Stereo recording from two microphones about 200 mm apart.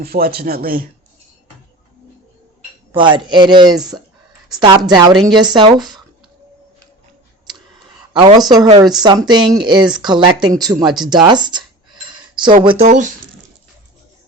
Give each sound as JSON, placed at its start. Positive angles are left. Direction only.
{"t": 0.0, "sound": "speech", "side_deg": -50}
{"t": 2.9, "sound": "speech", "side_deg": -25}
{"t": 8.1, "sound": "speech", "side_deg": -20}
{"t": 11.1, "sound": "cutlery", "side_deg": -20}
{"t": 12.8, "sound": "speech", "side_deg": -40}